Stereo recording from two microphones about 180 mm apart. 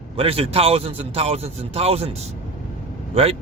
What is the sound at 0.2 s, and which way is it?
Speech, 30° right (ahead or behind).